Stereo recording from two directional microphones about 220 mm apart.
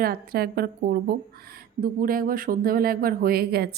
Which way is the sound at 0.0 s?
40° right (ahead or behind).